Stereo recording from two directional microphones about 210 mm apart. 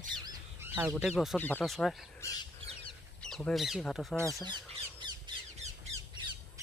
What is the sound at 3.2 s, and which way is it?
Speech, 5° left (ahead or behind).